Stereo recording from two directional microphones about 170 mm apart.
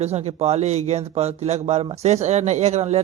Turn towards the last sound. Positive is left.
turn(degrees=-40)  # may be behind; listen again after turning